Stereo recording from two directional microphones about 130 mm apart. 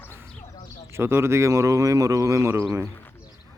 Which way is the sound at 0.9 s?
20° right (ahead or behind).